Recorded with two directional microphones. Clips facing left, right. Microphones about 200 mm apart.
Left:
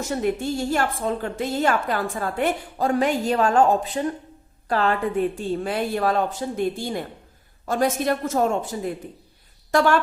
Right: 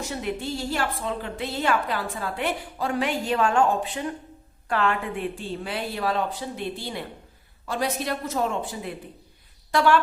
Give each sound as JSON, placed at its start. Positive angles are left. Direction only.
{"t": 0.0, "sound": "a woman's voice", "side_deg": 45}